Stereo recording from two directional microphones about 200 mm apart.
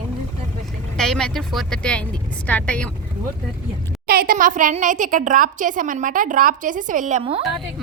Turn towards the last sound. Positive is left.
turn(degrees=-30)  # may be behind; listen again after turning